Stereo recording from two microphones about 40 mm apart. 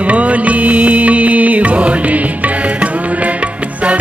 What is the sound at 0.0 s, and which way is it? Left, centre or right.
Music, right.